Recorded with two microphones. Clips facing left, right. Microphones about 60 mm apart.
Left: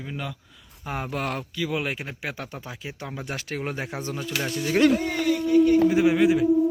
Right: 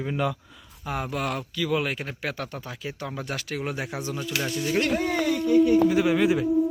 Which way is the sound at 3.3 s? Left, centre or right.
Left.